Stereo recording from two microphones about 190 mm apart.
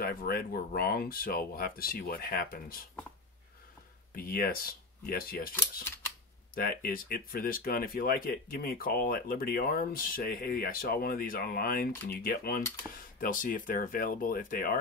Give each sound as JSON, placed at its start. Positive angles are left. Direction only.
{"t": 0.0, "sound": "speech", "side_deg": 50}
{"t": 4.1, "sound": "speech", "side_deg": 50}